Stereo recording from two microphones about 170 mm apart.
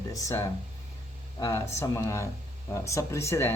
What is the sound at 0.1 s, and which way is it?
Speech, 20° left (ahead or behind).